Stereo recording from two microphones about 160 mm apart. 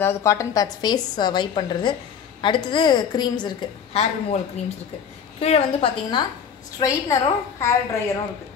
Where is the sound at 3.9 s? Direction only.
40° left (ahead or behind).